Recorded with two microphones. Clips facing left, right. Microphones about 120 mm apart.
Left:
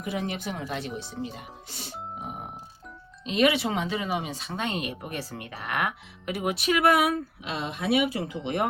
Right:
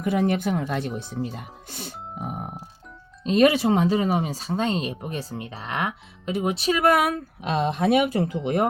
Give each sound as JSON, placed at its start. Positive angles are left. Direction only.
{"t": 0.0, "sound": "speech", "side_deg": -50}